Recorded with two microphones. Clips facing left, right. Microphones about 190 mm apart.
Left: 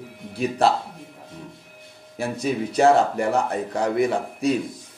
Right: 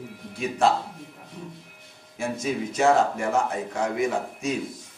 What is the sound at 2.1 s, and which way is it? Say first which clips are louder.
A man's voice: left 3 dB; 35° left (ahead or behind).